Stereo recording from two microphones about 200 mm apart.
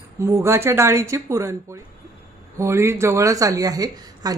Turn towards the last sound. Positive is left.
turn(degrees=-20)  # may be behind; listen again after turning